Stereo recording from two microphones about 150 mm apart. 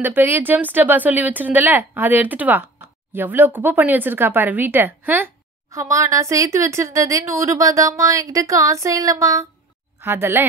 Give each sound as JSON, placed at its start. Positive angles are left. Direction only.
{"t": 0.0, "sound": "speech", "side_deg": -15}